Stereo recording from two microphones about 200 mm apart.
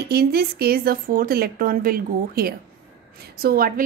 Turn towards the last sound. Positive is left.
turn(degrees=-50)  # may be behind; listen again after turning